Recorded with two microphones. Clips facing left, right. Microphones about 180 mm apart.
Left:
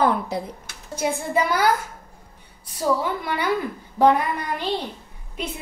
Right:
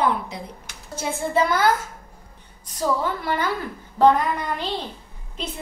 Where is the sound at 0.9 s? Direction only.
10° left (ahead or behind).